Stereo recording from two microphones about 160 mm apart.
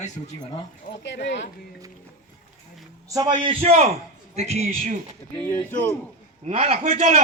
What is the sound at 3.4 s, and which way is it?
A man's voice, 35° right (ahead or behind).